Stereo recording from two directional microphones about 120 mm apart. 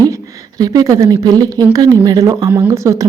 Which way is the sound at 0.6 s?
30° right (ahead or behind).